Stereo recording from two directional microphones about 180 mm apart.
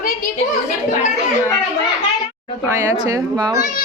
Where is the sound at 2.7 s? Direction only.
15° right (ahead or behind).